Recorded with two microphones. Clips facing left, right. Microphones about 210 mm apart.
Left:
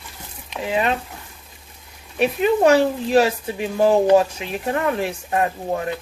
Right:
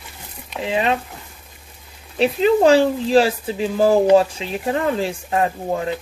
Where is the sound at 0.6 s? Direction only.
20° right (ahead or behind).